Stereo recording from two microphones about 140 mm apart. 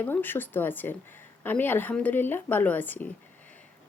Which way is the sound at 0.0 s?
15° left (ahead or behind).